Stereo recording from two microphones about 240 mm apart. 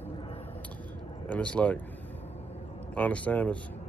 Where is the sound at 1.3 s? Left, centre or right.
Centre.